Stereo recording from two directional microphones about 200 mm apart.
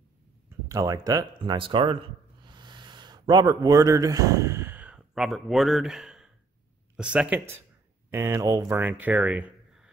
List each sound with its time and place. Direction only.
0.7 s speech: 15° right (ahead or behind)
2.4 s a sound: 20° right (ahead or behind); by 6.3 s centre (ahead or behind)
7.0 s speech: 5° right (ahead or behind)